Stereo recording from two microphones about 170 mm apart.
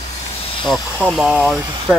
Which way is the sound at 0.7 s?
5° left (ahead or behind).